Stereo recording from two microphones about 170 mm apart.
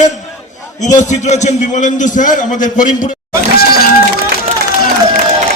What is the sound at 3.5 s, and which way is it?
Speech, 65° left (ahead or behind).